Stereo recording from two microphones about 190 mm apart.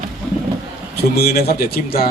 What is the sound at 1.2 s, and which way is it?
Speech, 55° left (ahead or behind).